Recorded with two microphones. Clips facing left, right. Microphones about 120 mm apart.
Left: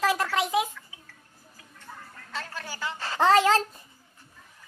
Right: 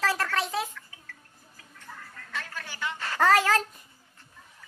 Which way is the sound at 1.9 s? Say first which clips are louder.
Left 1 dB; 30° left (ahead or behind).